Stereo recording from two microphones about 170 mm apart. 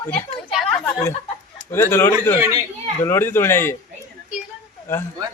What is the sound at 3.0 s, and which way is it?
Speech, 15° left (ahead or behind).